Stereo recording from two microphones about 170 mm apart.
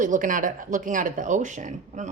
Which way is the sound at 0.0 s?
50° right (ahead or behind).